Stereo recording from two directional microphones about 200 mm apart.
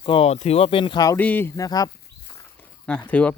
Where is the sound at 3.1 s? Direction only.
5° left (ahead or behind).